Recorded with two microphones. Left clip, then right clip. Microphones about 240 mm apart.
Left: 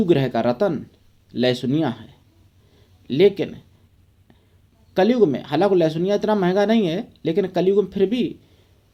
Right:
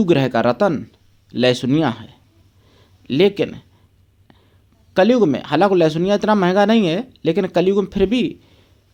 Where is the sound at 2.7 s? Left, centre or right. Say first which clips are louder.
Right 2 dB; right.